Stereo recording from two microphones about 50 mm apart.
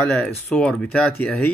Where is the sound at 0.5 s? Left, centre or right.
Centre.